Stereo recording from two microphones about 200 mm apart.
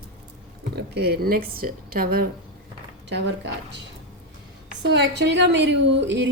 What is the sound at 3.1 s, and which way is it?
Speech, 60° right (ahead or behind).